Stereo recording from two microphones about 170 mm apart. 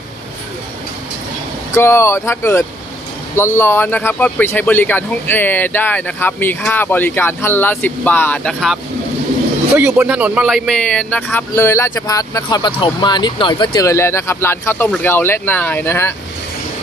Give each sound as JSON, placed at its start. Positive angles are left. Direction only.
{"t": 1.7, "sound": "speech", "side_deg": 15}
{"t": 9.7, "sound": "speech", "side_deg": -10}